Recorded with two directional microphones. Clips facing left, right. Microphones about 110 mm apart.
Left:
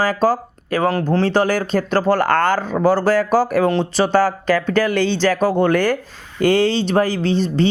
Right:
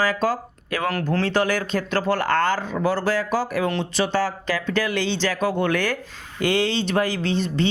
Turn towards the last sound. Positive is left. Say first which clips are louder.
# left 5 dB
turn(degrees=35)  # may be behind; listen again after turning